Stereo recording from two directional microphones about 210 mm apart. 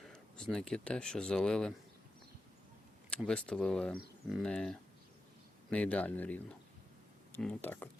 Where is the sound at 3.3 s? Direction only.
5° left (ahead or behind).